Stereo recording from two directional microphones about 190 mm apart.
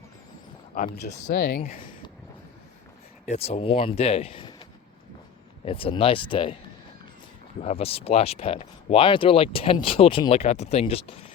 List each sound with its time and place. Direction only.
0.7 s speech: 45° left (ahead or behind)
1.3 s speech: 55° left (ahead or behind)
3.2 s speech: 35° left (ahead or behind)
5.6 s speech: 30° left (ahead or behind)
7.6 s speech: 30° left (ahead or behind)